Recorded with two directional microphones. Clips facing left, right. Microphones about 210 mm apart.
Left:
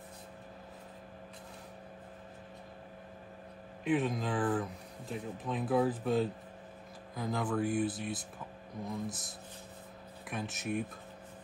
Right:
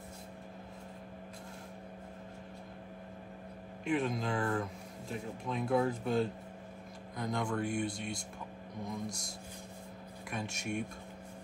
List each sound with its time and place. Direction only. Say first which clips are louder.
3.8 s speech: left 2 dB; centre (ahead or behind)
10.3 s speech: left 2 dB; centre (ahead or behind)